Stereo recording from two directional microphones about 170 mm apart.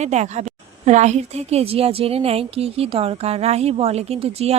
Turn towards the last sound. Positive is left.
turn(degrees=-35)  # may be behind; listen again after turning